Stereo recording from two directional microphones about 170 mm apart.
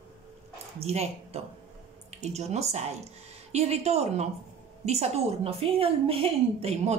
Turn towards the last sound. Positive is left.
turn(degrees=-35)  # may be behind; listen again after turning